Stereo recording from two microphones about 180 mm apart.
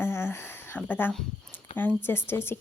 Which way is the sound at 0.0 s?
10° left (ahead or behind).